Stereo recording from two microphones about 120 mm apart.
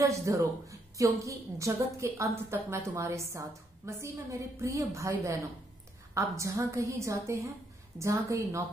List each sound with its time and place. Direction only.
0.0 s a woman's voice: 25° right (ahead or behind)